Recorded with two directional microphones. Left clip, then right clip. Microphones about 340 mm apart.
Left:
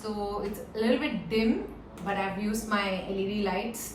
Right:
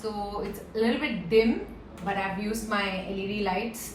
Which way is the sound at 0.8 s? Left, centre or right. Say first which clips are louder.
Right 1 dB; centre.